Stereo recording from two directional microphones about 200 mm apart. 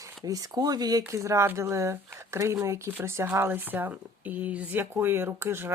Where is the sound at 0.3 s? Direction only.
20° right (ahead or behind).